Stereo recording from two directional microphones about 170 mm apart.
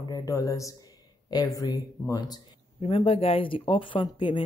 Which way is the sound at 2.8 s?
35° left (ahead or behind).